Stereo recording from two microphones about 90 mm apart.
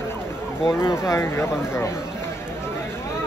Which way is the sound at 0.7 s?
35° left (ahead or behind).